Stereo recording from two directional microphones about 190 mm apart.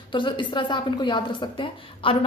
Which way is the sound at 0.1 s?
25° left (ahead or behind).